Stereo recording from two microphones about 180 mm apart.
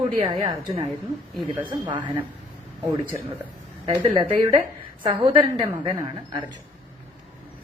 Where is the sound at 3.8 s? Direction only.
25° right (ahead or behind).